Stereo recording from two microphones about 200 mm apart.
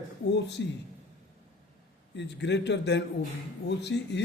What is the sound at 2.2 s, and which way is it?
A man's voice, 60° left (ahead or behind).